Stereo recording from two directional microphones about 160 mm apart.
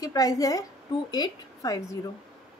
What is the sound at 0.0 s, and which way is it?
A woman's voice, 20° left (ahead or behind).